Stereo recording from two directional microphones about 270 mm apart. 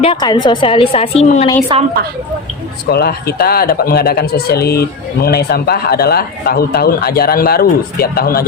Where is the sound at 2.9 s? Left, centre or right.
Left.